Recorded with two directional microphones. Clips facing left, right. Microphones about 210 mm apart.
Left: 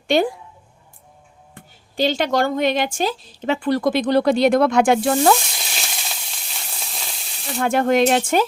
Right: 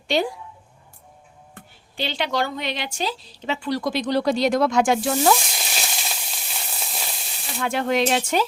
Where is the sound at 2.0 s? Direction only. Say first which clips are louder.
Left 6 dB; 45° left (ahead or behind).